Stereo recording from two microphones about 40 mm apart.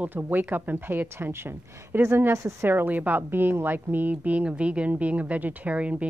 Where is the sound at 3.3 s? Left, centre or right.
Right.